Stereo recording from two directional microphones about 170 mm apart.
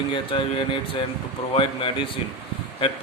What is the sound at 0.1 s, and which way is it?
Speech, 30° left (ahead or behind).